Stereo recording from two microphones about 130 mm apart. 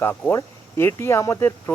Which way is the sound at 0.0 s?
15° left (ahead or behind).